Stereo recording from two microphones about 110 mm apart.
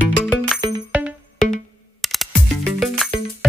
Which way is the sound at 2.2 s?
Centre (ahead or behind).